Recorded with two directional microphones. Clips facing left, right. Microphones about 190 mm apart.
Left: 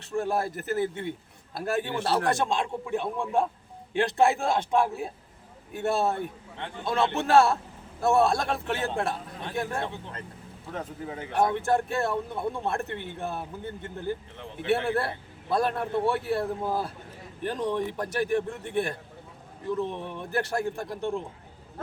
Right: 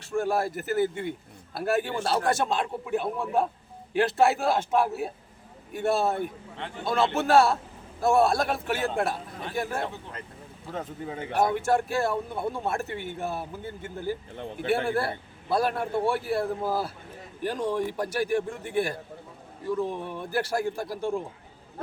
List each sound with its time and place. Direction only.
0.1 s a man's voice: centre (ahead or behind)
11.1 s speech: 25° right (ahead or behind)
11.3 s a man's voice: 5° right (ahead or behind)